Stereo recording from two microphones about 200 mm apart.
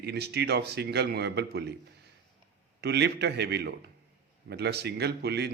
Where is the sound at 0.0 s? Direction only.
55° right (ahead or behind).